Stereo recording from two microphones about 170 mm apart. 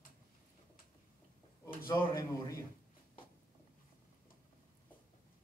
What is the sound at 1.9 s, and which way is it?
Speech, 20° left (ahead or behind).